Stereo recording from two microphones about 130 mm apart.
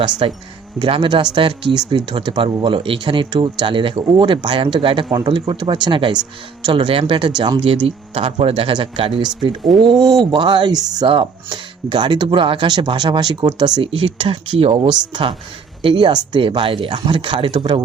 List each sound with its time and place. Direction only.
0.2 s speech: 45° right (ahead or behind)
7.9 s speech: 50° right (ahead or behind)